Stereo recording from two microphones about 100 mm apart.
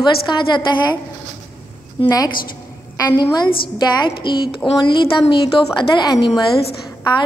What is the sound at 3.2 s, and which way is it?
A woman's voice, 45° left (ahead or behind).